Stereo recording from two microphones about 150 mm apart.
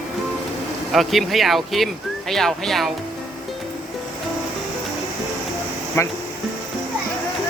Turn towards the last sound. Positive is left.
turn(degrees=15)  # may be behind; listen again after turning